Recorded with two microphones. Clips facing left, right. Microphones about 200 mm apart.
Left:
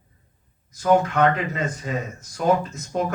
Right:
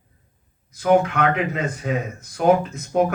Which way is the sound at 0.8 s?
60° right (ahead or behind).